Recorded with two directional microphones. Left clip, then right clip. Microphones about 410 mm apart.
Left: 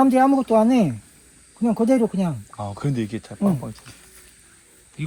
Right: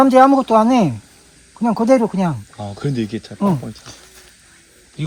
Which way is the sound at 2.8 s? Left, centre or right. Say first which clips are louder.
Right 6 dB; centre.